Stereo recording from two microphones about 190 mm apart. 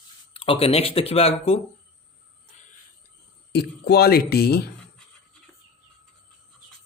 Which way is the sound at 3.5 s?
60° left (ahead or behind).